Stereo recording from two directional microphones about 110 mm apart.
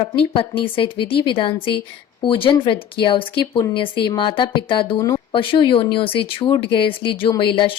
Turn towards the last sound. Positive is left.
turn(degrees=50)  # may be behind; listen again after turning